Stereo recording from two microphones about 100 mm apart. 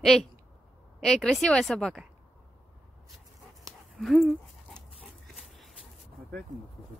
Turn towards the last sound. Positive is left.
turn(degrees=0)  # may be behind; listen again after turning